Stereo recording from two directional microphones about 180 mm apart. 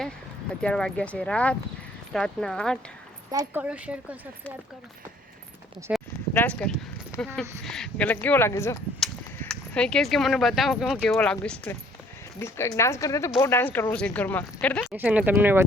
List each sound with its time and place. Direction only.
0.6 s speech: 5° left (ahead or behind)
3.3 s speech: 10° right (ahead or behind)
5.9 s clip-clop: 10° right (ahead or behind)
6.3 s speech: 10° left (ahead or behind)
7.6 s speech: 5° left (ahead or behind)
14.8 s speech: 10° right (ahead or behind)